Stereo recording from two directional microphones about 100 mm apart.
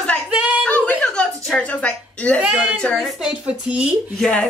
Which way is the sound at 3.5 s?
10° right (ahead or behind).